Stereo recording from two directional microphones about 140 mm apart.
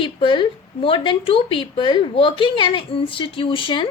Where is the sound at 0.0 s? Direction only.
35° left (ahead or behind).